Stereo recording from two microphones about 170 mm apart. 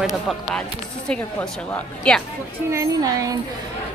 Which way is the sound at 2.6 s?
20° right (ahead or behind).